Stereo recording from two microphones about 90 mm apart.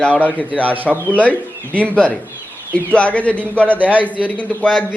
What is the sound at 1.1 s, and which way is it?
A man's voice, 15° left (ahead or behind).